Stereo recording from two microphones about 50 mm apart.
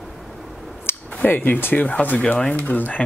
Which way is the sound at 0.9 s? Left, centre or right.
Left.